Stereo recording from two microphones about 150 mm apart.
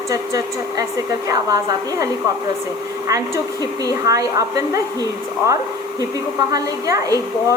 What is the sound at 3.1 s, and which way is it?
A woman's voice, 20° right (ahead or behind).